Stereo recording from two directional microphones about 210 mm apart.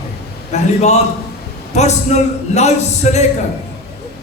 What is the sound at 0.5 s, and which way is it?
Speech, 30° left (ahead or behind).